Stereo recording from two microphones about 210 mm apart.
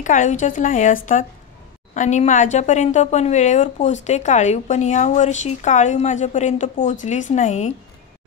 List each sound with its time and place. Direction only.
0.0 s a woman's voice: 35° left (ahead or behind)
2.0 s a woman's voice: 35° left (ahead or behind)